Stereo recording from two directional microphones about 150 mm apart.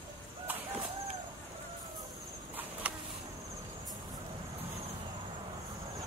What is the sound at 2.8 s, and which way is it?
Insect, 10° right (ahead or behind).